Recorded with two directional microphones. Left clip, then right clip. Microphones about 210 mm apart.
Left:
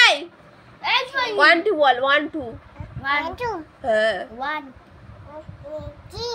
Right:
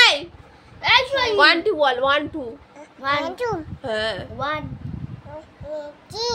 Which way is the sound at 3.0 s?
45° right (ahead or behind).